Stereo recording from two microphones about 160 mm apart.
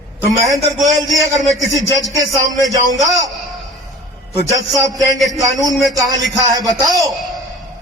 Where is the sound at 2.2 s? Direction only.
Centre (ahead or behind).